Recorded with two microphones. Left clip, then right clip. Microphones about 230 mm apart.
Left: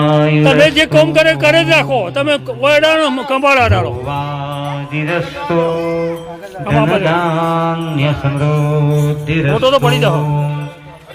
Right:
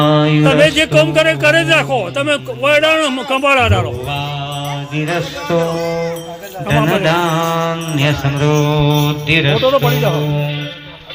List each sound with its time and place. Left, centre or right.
0.0 s mantra: left
0.4 s a man's voice: centre
4.9 s mantra: left
6.7 s mantra: left
8.4 s a man's voice: centre